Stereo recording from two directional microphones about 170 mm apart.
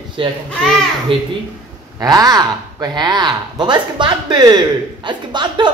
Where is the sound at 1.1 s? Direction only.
30° right (ahead or behind).